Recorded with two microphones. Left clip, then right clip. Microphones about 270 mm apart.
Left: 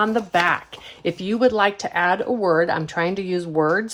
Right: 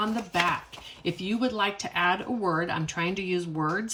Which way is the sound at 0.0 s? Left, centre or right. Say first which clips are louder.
Left 8 dB; centre.